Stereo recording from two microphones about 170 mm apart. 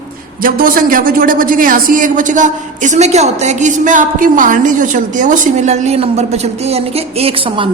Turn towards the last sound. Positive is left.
turn(degrees=-35)  # may be behind; listen again after turning